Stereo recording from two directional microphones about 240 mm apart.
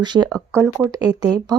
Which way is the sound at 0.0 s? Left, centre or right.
Centre.